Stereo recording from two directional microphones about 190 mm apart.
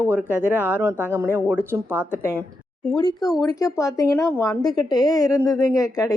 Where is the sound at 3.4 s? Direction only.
15° left (ahead or behind).